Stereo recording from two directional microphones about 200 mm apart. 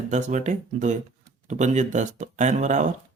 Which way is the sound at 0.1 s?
35° right (ahead or behind).